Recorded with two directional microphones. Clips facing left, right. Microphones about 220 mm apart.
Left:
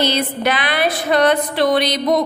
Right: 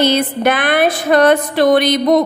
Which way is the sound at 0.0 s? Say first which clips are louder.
Right 5 dB; 50° right (ahead or behind).